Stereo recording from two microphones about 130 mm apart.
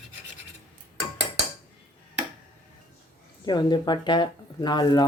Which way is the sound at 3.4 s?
35° left (ahead or behind).